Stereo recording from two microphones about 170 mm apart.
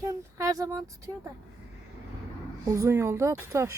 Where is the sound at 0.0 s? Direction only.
20° right (ahead or behind).